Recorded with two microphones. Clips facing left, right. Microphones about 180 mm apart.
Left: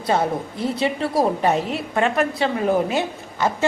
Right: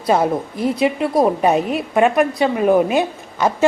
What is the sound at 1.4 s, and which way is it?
A woman's voice, 20° right (ahead or behind).